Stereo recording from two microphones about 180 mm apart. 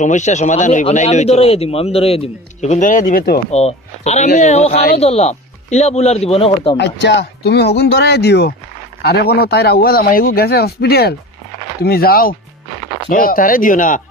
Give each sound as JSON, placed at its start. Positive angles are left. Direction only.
{"t": 0.0, "sound": "speech", "side_deg": 40}
{"t": 3.5, "sound": "speech", "side_deg": 40}
{"t": 6.8, "sound": "a man's voice", "side_deg": 75}